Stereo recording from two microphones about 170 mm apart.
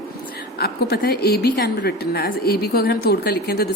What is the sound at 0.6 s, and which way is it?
A woman's voice, 65° left (ahead or behind).